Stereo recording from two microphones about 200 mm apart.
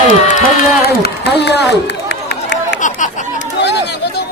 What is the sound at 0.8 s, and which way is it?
Run, 55° left (ahead or behind).